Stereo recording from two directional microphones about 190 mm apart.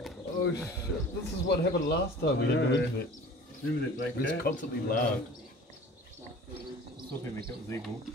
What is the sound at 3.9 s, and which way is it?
Speech, 45° left (ahead or behind).